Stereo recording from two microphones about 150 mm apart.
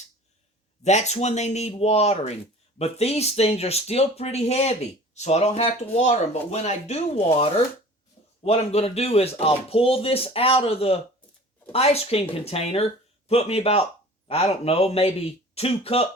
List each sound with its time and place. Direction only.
0.9 s speech: 50° left (ahead or behind)